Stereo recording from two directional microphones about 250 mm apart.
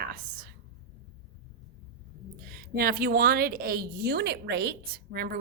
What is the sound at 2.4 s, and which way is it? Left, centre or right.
A woman's voice, right.